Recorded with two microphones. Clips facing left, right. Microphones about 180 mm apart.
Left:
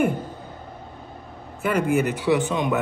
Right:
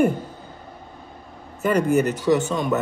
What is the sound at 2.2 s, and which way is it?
Speech, 15° left (ahead or behind).